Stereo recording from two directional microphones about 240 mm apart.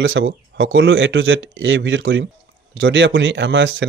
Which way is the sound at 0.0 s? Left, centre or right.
Right.